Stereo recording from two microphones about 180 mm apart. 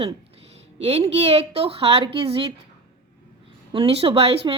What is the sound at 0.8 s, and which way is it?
Speech, 35° right (ahead or behind).